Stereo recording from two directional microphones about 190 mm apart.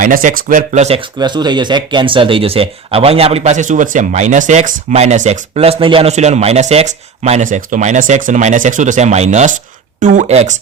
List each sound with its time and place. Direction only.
0.0 s speech: 45° right (ahead or behind)